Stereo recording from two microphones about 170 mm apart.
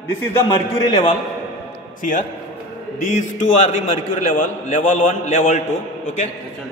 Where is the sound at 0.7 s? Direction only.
25° left (ahead or behind).